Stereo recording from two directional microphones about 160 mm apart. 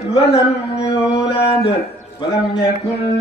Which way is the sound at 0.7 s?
40° left (ahead or behind).